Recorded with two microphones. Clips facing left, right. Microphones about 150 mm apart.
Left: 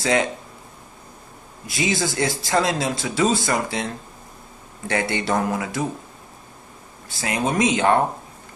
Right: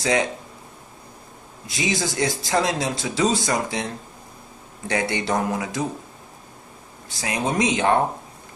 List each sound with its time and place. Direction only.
0.0 s speech: 20° right (ahead or behind)
1.7 s speech: 20° right (ahead or behind)
7.2 s speech: 20° right (ahead or behind)